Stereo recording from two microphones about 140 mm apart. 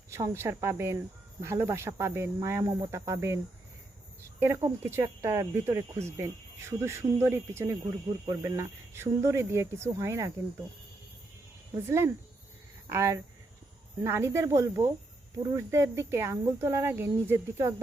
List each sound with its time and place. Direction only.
0.1 s speech: 20° right (ahead or behind)
11.7 s speech: 20° right (ahead or behind)